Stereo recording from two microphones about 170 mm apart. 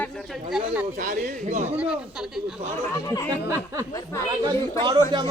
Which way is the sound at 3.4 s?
20° right (ahead or behind).